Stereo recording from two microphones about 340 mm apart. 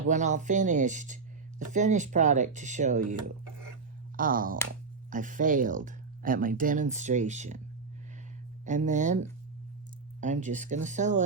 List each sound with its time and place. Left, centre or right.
0.1 s speech: right
4.2 s speech: right
8.6 s speech: right
10.2 s speech: right